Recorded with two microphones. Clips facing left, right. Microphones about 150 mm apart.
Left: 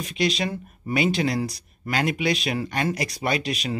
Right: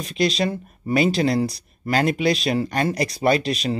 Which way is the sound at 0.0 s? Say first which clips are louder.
Right 3 dB; 35° right (ahead or behind).